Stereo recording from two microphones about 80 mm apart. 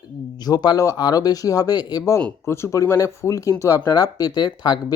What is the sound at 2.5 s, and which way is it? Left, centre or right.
Speech, left.